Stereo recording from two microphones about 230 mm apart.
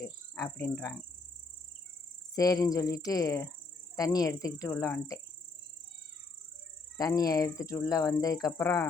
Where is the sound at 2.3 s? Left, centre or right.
Centre.